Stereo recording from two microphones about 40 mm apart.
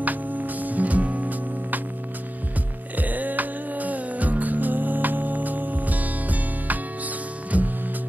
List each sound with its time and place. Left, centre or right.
0.0 s music: right
3.0 s music: right